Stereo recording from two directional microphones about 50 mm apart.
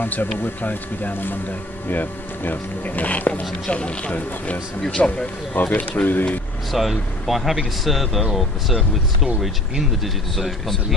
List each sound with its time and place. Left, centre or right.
0.0 s speech: left
6.7 s speech: centre
10.3 s speech: centre